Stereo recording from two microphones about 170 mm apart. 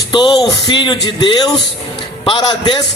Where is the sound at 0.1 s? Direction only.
25° left (ahead or behind).